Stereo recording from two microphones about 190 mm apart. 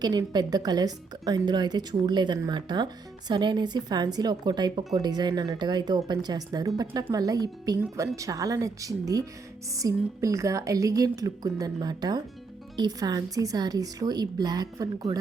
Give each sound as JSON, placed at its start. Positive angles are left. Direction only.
{"t": 0.0, "sound": "a woman's voice", "side_deg": -20}